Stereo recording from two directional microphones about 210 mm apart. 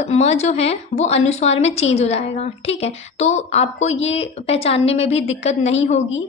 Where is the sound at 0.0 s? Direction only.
30° left (ahead or behind).